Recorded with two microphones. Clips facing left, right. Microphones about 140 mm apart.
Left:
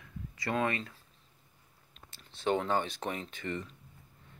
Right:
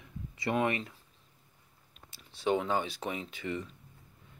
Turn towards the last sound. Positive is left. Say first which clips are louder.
# right 1 dB
turn(degrees=-5)  # may be behind; listen again after turning